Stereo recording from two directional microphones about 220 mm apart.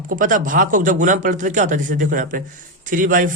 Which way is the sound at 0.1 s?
40° right (ahead or behind).